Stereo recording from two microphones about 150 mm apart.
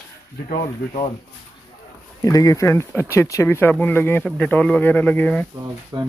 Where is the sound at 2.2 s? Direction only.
25° left (ahead or behind).